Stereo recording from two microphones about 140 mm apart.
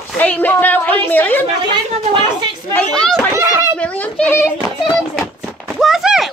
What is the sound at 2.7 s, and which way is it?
Speech, 5° left (ahead or behind).